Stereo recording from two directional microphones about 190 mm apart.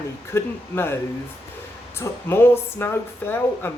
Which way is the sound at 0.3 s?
15° left (ahead or behind).